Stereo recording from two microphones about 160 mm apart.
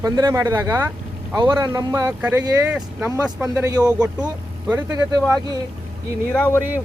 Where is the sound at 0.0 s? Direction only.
25° right (ahead or behind).